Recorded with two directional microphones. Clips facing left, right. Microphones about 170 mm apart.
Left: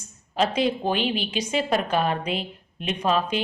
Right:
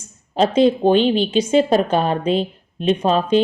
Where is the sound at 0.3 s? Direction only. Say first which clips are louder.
Right 8 dB; 30° right (ahead or behind).